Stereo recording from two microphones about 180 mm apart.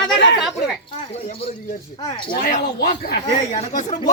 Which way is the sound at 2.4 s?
55° left (ahead or behind).